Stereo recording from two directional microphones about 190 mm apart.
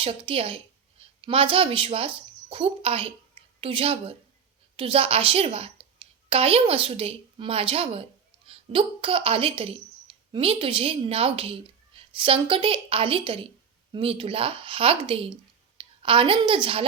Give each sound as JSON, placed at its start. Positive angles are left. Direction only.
{"t": 0.0, "sound": "a woman's voice", "side_deg": -30}